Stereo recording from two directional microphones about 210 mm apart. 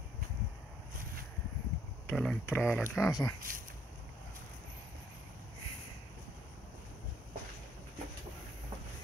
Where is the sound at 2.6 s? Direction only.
Centre (ahead or behind).